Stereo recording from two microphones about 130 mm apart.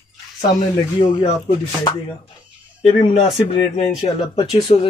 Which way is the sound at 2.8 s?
55° left (ahead or behind).